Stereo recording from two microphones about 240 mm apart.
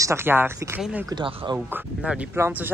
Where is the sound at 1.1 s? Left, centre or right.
Centre.